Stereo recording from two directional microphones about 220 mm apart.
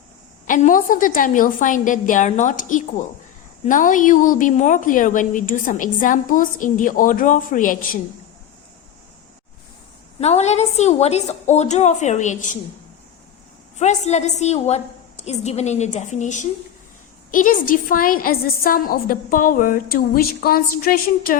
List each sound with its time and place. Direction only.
0.4 s a woman's voice: 35° left (ahead or behind)
10.2 s a woman's voice: 30° left (ahead or behind)
13.7 s a woman's voice: 30° left (ahead or behind)